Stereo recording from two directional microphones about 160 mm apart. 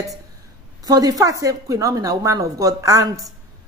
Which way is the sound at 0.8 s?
25° right (ahead or behind).